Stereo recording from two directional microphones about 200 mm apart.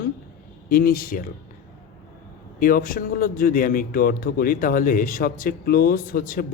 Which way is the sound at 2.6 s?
45° left (ahead or behind).